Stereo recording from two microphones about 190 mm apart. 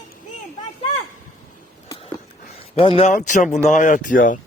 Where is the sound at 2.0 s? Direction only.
35° left (ahead or behind).